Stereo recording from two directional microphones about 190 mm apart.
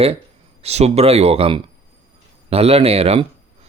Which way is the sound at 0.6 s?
35° right (ahead or behind).